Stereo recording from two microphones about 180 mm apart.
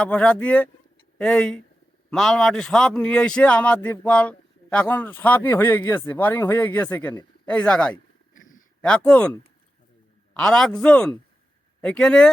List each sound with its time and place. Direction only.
0.0 s a man's voice: 5° left (ahead or behind)
8.3 s a sound: 45° left (ahead or behind)
8.8 s a man's voice: 5° left (ahead or behind)